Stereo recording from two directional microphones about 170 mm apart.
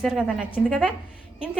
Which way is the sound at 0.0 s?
5° right (ahead or behind).